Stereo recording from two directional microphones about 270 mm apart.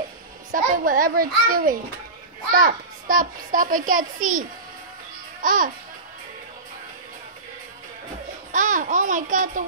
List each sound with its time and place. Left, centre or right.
0.5 s a child's voice: right
8.5 s a child's voice: right